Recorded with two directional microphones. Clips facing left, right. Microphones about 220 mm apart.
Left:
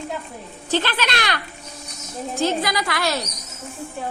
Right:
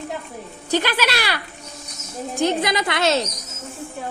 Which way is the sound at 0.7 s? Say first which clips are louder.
Right 2 dB; 10° right (ahead or behind).